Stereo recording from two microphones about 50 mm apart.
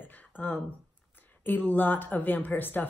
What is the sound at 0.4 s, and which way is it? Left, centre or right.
Speech, left.